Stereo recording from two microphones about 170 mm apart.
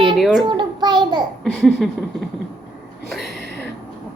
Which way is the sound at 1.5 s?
Centre (ahead or behind).